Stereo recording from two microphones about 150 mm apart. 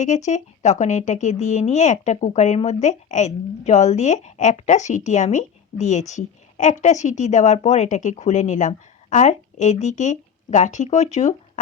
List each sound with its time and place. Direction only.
0.0 s speech: 50° left (ahead or behind)